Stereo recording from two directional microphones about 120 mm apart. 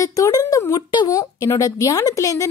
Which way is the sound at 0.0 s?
30° left (ahead or behind).